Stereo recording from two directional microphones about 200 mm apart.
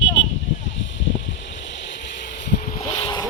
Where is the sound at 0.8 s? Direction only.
65° left (ahead or behind).